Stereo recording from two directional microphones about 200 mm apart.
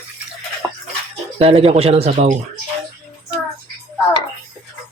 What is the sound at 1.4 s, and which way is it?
Speech, 30° right (ahead or behind).